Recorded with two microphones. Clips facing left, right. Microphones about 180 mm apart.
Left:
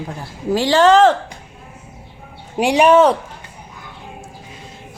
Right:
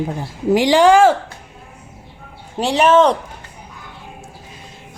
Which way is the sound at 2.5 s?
15° left (ahead or behind).